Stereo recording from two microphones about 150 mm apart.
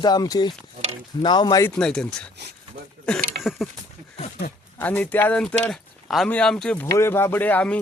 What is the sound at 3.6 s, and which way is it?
Speech, centre (ahead or behind).